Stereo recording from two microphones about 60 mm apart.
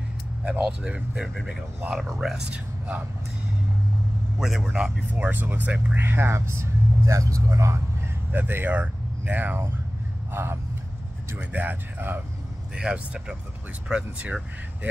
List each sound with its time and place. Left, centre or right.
0.5 s speech: centre
1.9 s speech: centre
4.4 s speech: centre
4.6 s speech: centre
5.1 s speech: right
5.9 s speech: right
8.3 s speech: right
10.3 s speech: right
11.3 s speech: right
12.7 s speech: centre
14.2 s speech: right